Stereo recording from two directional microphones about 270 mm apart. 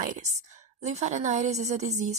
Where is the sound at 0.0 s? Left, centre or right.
Right.